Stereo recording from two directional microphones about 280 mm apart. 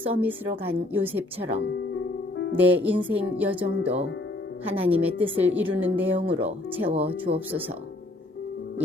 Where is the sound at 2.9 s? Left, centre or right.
Centre.